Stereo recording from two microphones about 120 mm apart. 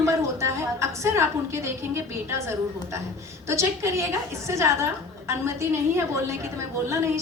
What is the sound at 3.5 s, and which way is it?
A woman's voice, 25° right (ahead or behind).